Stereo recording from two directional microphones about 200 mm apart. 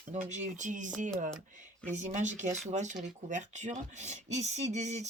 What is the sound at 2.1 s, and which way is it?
Speech, 35° right (ahead or behind).